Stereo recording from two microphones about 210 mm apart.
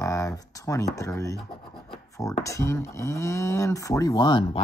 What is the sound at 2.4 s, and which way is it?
Speech, 15° left (ahead or behind).